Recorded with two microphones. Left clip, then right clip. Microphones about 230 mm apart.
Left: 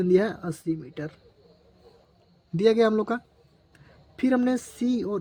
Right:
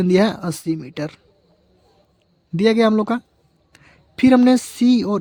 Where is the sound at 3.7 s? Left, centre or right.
Right.